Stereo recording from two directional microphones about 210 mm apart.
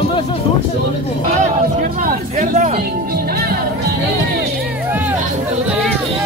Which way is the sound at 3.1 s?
45° right (ahead or behind).